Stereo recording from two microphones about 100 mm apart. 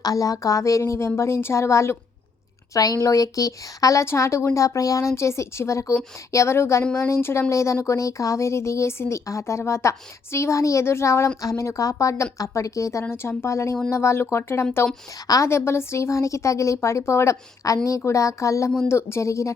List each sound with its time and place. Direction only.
0.0 s a woman's voice: 35° left (ahead or behind)